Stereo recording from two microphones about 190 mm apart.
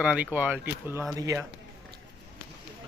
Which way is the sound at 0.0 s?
5° right (ahead or behind).